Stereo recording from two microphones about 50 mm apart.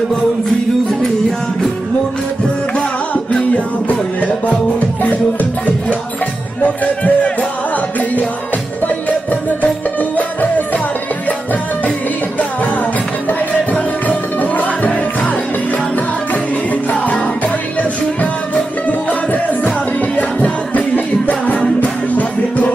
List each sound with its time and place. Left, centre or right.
2.7 s music: left
6.6 s speech: left
8.8 s music: left
13.7 s music: left
16.9 s music: left